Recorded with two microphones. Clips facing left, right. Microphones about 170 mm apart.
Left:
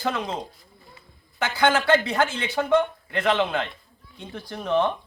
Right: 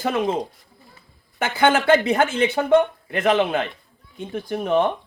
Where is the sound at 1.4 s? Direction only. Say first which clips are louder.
Right 3 dB; 50° right (ahead or behind).